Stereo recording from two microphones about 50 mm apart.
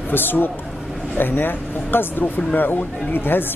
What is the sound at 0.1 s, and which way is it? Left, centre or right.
Speech, left.